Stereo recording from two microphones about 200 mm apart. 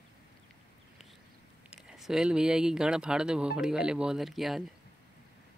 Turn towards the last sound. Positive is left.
turn(degrees=0)  # may be behind; listen again after turning